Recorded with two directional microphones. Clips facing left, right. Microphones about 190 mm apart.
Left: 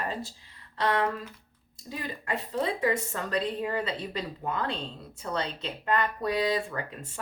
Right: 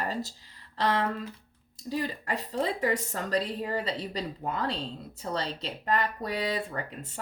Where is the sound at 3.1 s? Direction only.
35° right (ahead or behind).